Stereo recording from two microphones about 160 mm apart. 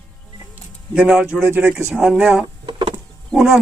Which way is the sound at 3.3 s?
Centre (ahead or behind).